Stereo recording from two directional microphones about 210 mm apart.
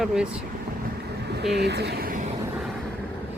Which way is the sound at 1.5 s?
50° right (ahead or behind).